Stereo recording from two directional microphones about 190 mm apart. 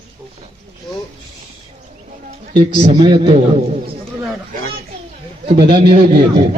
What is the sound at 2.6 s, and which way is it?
A man's voice, 25° right (ahead or behind).